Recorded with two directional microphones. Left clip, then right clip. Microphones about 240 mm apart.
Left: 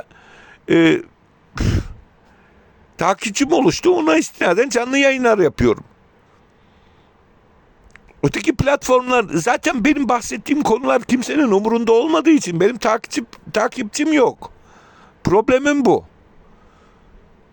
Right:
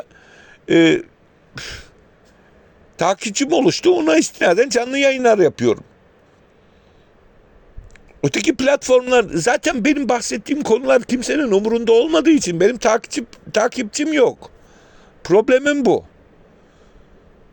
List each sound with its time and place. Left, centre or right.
0.0 s a sound: centre
1.5 s throat clearing: centre
2.9 s a man's voice: centre
7.9 s a man's voice: left